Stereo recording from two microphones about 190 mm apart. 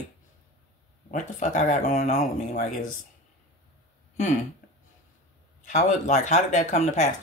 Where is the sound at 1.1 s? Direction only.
40° left (ahead or behind).